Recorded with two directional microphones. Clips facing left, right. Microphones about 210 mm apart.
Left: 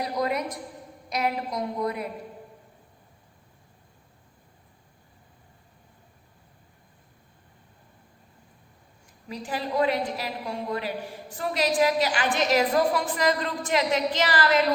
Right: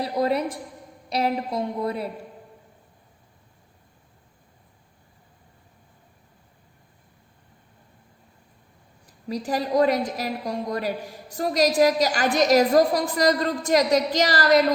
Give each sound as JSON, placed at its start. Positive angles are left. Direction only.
{"t": 0.0, "sound": "a woman's voice", "side_deg": -30}
{"t": 9.0, "sound": "a woman's voice", "side_deg": -40}